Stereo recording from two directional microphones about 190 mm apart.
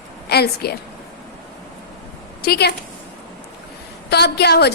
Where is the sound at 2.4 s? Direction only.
55° left (ahead or behind).